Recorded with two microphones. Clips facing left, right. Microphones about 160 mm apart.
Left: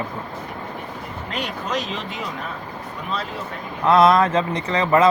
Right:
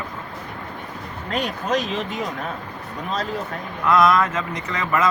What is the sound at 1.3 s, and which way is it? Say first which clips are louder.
Speech: right 4 dB; 45° right (ahead or behind).